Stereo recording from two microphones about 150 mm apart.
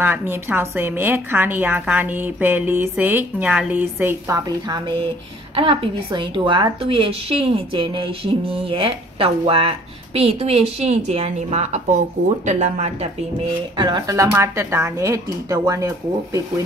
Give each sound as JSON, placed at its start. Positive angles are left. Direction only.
{"t": 0.0, "sound": "a woman's voice", "side_deg": -15}
{"t": 4.6, "sound": "a woman's voice", "side_deg": -30}
{"t": 13.7, "sound": "speech", "side_deg": -30}